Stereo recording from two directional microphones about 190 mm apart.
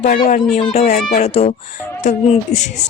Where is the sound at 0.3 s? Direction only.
40° left (ahead or behind).